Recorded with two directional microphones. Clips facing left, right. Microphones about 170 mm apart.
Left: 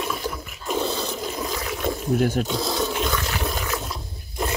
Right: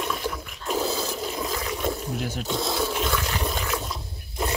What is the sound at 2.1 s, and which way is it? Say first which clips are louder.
Speech: left 9 dB; 55° left (ahead or behind).